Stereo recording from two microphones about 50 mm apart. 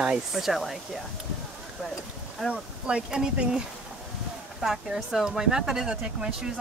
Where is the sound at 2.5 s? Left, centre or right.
Right.